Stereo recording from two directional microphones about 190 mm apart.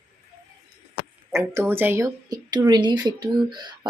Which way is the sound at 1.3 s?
10° right (ahead or behind).